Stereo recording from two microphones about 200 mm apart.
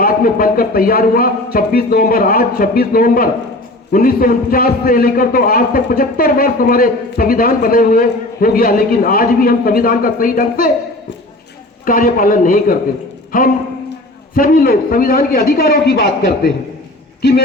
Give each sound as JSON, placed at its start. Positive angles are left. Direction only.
{"t": 0.0, "sound": "a man's voice", "side_deg": 45}
{"t": 11.9, "sound": "a man's voice", "side_deg": 45}